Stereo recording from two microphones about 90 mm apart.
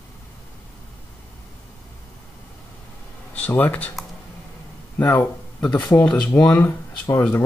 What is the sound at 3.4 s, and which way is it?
Speech, 20° left (ahead or behind).